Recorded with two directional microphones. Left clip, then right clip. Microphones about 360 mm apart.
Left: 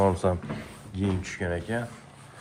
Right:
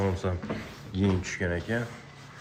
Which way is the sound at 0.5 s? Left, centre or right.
Centre.